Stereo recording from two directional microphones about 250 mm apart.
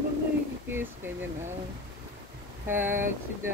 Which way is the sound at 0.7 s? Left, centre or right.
Centre.